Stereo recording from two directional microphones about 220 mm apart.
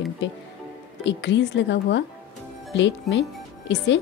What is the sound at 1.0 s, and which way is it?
A woman's voice, 55° left (ahead or behind).